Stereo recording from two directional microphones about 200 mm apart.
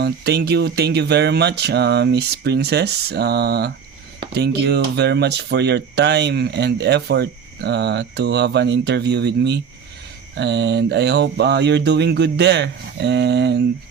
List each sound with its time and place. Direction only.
0.0 s speech: 55° right (ahead or behind)